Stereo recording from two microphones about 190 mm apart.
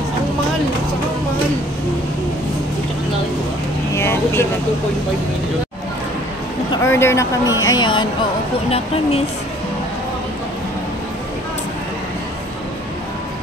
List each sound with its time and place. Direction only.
3.9 s vehicle: 15° left (ahead or behind)
6.7 s speech: 15° left (ahead or behind); by 9.2 s 30° left (ahead or behind)